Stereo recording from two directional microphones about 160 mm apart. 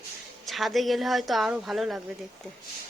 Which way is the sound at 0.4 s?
Centre (ahead or behind).